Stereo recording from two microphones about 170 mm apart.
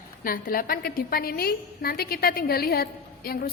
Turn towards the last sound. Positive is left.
turn(degrees=60)  # may be behind; listen again after turning